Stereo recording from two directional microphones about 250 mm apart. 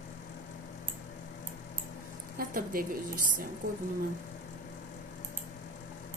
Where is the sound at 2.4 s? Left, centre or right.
Right.